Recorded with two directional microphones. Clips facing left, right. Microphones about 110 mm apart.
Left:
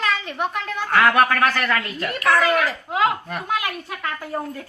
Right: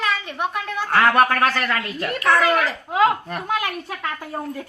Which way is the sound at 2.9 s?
30° right (ahead or behind).